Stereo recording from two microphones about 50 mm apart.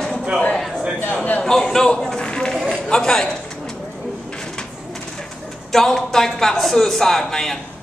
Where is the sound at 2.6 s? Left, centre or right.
Centre.